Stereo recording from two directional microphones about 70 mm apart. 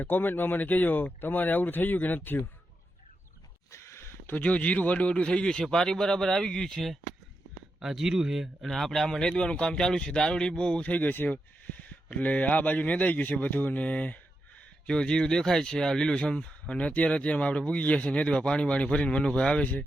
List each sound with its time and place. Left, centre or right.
0.0 s speech: left
3.7 s a sound: left
4.4 s speech: centre